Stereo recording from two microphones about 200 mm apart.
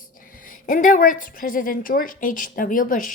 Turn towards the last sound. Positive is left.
turn(degrees=45)  # may be behind; listen again after turning